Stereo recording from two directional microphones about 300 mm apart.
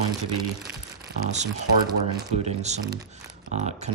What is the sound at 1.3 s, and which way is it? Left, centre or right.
Speech, right.